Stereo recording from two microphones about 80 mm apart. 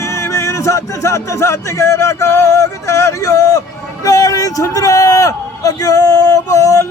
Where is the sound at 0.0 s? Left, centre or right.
Left.